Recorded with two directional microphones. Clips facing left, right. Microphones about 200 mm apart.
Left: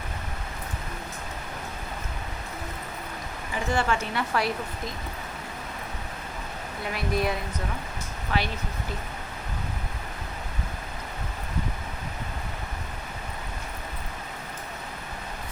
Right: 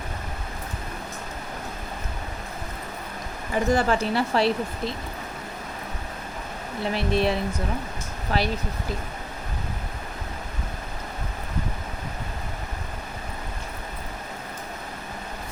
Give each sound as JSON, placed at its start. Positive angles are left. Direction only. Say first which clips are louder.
{"t": 3.5, "sound": "speech", "louder": "right 5 dB", "side_deg": -40}
{"t": 6.9, "sound": "speech", "louder": "right 4 dB", "side_deg": -30}